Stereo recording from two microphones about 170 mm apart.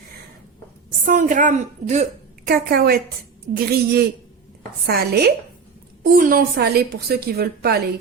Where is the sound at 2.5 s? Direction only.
65° right (ahead or behind).